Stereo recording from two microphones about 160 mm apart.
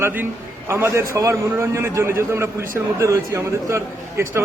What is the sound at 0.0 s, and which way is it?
A man's voice, 10° right (ahead or behind).